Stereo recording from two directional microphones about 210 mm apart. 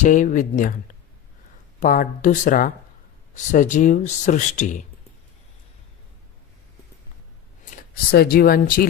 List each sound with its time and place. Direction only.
0.0 s speech: 35° left (ahead or behind)
1.8 s speech: 40° left (ahead or behind)
8.1 s speech: 45° left (ahead or behind)